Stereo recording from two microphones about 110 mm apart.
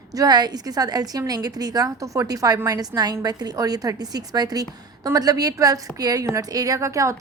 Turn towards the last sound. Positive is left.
turn(degrees=-30)  # may be behind; listen again after turning